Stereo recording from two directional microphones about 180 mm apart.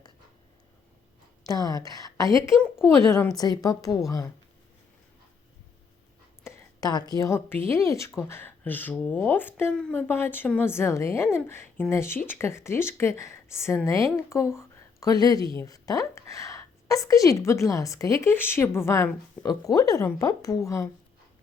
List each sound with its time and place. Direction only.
1.5 s a woman's voice: 20° left (ahead or behind)
6.4 s a woman's voice: 20° left (ahead or behind)